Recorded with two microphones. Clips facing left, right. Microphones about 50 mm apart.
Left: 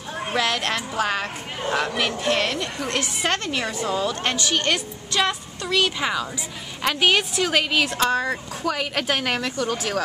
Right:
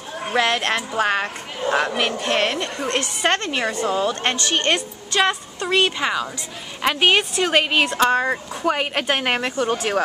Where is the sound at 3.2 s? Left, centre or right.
Right.